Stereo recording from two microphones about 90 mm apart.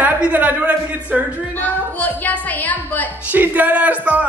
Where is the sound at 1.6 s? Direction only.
20° left (ahead or behind).